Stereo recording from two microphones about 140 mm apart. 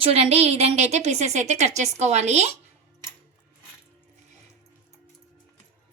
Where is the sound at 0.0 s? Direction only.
45° right (ahead or behind).